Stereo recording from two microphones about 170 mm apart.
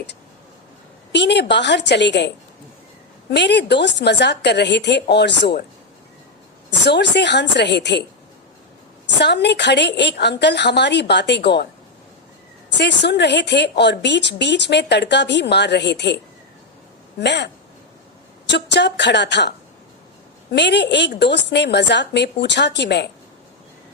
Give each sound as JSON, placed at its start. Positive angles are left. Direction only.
{"t": 1.1, "sound": "a woman's voice", "side_deg": 90}
{"t": 6.7, "sound": "a woman's voice", "side_deg": 90}
{"t": 9.2, "sound": "a woman's voice", "side_deg": 85}
{"t": 12.7, "sound": "a woman's voice", "side_deg": 90}